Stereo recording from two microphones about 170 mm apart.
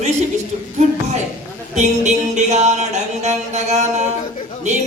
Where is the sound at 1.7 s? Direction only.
45° right (ahead or behind).